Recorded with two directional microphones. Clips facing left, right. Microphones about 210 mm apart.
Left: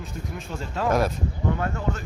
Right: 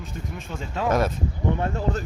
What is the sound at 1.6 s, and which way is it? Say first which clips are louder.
Speech: right 2 dB; 30° right (ahead or behind).